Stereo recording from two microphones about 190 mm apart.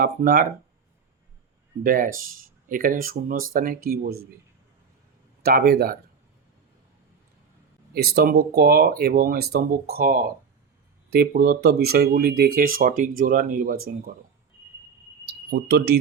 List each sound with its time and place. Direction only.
0.0 s speech: 50° right (ahead or behind)
1.8 s speech: 45° right (ahead or behind)
5.4 s speech: 55° right (ahead or behind)
7.9 s speech: 55° right (ahead or behind)
15.3 s speech: 55° right (ahead or behind)